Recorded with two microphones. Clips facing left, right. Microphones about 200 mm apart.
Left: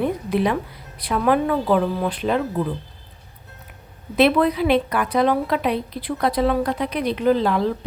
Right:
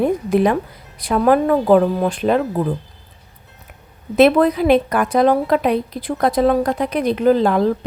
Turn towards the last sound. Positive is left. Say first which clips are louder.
# right 4 dB
turn(degrees=-45)  # may be behind; listen again after turning